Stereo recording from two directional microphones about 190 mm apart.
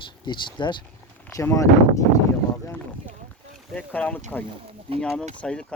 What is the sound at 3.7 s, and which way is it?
Speech, 10° left (ahead or behind).